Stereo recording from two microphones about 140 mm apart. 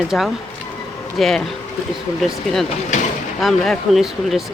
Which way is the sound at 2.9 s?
55° left (ahead or behind).